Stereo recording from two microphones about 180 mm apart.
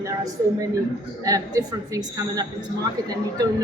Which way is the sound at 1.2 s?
20° right (ahead or behind).